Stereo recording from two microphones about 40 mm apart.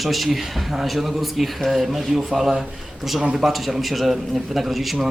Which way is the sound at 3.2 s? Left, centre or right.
Centre.